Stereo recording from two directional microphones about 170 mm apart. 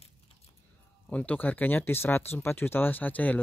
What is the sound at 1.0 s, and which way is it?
Speech, 10° left (ahead or behind).